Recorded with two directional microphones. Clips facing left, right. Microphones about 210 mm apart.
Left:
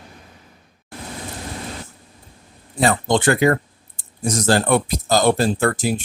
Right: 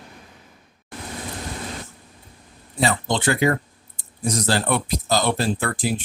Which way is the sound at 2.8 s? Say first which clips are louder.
Left 4 dB; 50° left (ahead or behind).